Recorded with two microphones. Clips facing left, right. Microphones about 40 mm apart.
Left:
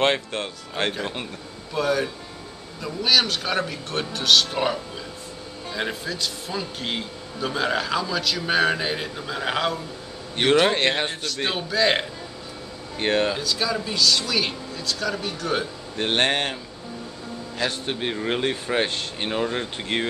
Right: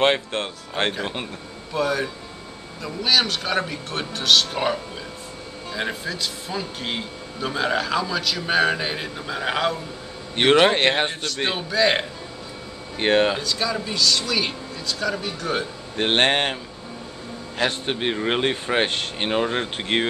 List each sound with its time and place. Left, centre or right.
0.3 s speech: right
1.7 s speech: centre
10.5 s speech: centre
11.5 s speech: centre
13.0 s speech: right
13.4 s speech: centre
16.0 s speech: right
17.8 s speech: right
18.9 s speech: right
19.2 s speech: right